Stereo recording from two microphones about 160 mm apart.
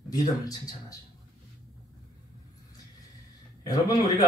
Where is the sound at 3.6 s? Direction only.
25° left (ahead or behind).